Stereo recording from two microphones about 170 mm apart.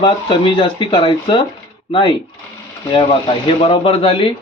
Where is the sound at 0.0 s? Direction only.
30° left (ahead or behind).